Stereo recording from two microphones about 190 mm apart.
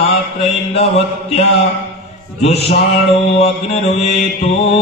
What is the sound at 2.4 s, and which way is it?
Music, 35° left (ahead or behind).